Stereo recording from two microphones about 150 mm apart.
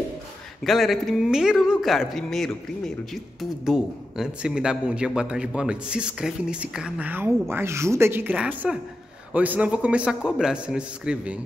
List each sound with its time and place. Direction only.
0.7 s a man's voice: centre (ahead or behind)